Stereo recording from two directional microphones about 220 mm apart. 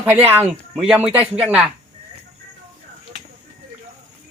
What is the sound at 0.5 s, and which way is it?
Speech, centre (ahead or behind).